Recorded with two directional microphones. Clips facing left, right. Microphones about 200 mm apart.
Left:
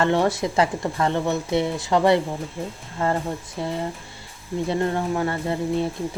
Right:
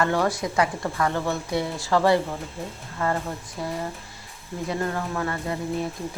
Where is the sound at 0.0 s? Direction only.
25° left (ahead or behind).